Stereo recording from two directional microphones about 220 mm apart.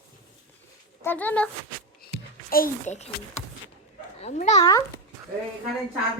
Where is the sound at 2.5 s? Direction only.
35° left (ahead or behind).